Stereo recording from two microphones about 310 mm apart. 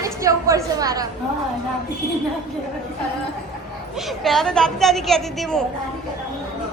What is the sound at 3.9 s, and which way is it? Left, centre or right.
A woman's voice, centre.